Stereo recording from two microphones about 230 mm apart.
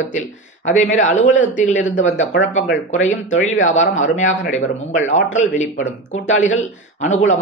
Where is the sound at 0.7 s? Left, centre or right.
Left.